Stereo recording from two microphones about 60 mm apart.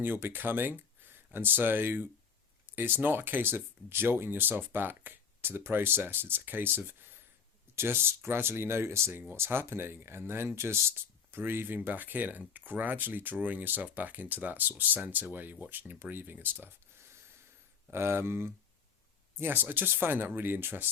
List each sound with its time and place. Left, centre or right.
0.0 s speech: right